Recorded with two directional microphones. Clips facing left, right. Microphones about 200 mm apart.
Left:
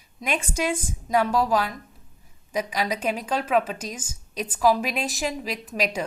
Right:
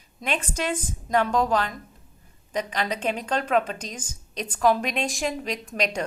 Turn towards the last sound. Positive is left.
turn(degrees=5)  # may be behind; listen again after turning